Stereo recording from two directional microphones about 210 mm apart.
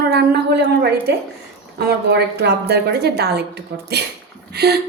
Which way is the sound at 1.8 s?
50° right (ahead or behind).